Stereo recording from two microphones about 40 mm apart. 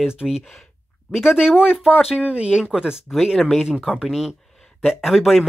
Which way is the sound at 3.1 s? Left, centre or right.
Centre.